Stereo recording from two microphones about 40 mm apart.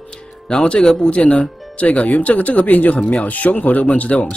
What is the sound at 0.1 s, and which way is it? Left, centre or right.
Music, left.